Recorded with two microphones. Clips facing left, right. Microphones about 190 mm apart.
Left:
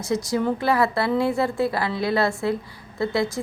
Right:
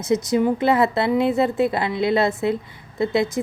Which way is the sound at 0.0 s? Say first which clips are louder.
Right 4 dB; 20° right (ahead or behind).